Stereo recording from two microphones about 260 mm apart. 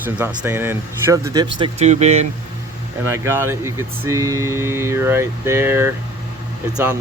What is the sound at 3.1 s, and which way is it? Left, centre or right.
Speech, centre.